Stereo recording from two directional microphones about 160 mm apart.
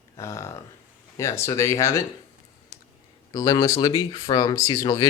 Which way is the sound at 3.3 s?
20° left (ahead or behind).